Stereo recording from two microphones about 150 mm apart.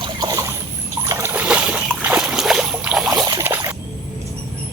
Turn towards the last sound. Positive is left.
turn(degrees=-15)  # may be behind; listen again after turning